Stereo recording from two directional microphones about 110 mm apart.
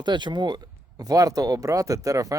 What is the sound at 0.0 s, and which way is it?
Speech, 45° right (ahead or behind).